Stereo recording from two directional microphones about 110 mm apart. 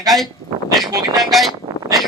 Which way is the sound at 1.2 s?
Centre (ahead or behind).